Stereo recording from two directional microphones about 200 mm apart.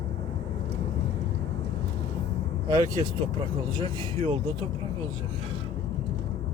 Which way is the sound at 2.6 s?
20° right (ahead or behind).